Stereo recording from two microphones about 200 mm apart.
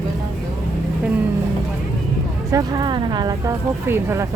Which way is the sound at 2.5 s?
20° right (ahead or behind).